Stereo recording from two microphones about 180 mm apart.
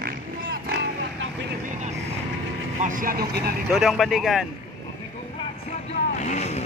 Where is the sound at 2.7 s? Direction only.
45° right (ahead or behind).